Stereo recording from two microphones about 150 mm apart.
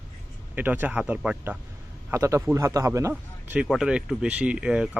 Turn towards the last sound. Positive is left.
turn(degrees=-5)  # may be behind; listen again after turning